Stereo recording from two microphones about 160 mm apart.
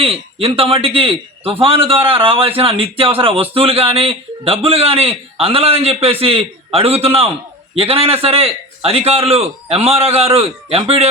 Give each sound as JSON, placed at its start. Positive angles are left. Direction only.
{"t": 0.0, "sound": "a man's voice", "side_deg": -40}